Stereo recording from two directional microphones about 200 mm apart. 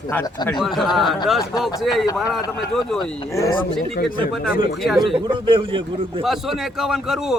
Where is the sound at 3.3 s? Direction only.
15° left (ahead or behind).